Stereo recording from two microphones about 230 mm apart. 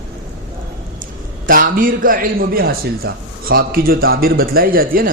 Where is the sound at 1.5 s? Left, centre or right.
Right.